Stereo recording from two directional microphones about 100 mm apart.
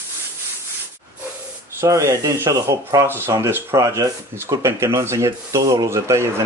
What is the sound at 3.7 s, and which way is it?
Speech, 35° right (ahead or behind).